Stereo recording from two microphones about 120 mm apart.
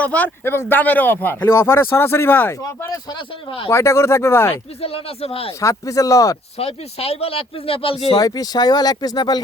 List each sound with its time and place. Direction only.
0.0 s speech: 10° left (ahead or behind)
3.1 s speech: 45° left (ahead or behind)
3.7 s speech: 25° left (ahead or behind)
4.8 s speech: 55° left (ahead or behind)
5.5 s speech: 25° left (ahead or behind)
6.6 s speech: 60° left (ahead or behind)
8.2 s speech: 35° left (ahead or behind)